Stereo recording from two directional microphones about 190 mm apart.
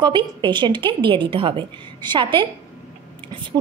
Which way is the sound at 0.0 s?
25° right (ahead or behind).